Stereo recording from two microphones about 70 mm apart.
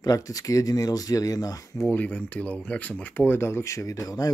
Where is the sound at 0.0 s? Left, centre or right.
Left.